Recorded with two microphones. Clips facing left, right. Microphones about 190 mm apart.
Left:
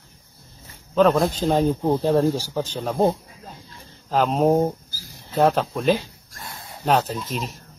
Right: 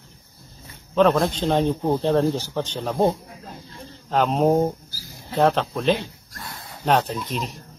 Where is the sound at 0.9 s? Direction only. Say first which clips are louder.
Left 1 dB; centre (ahead or behind).